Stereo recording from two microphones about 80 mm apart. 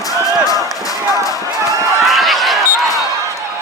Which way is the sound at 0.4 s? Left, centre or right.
Left.